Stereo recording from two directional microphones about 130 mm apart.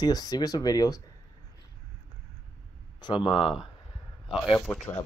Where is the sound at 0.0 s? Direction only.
30° left (ahead or behind).